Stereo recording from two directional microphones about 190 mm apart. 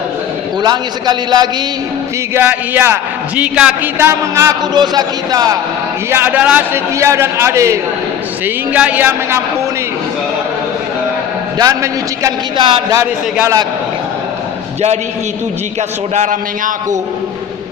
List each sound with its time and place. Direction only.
0.6 s a man's voice: 20° right (ahead or behind)
2.3 s a man's voice: 10° right (ahead or behind)
11.5 s a man's voice: 20° right (ahead or behind)
13.3 s a man's voice: 10° right (ahead or behind)
16.1 s a man's voice: 40° right (ahead or behind)